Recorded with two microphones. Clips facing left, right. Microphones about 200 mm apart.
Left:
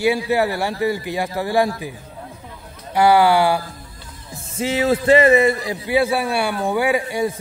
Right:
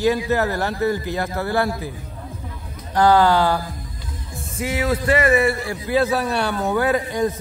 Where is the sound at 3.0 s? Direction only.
10° left (ahead or behind).